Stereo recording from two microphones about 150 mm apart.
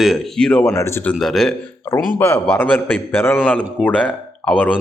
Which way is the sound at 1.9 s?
20° left (ahead or behind).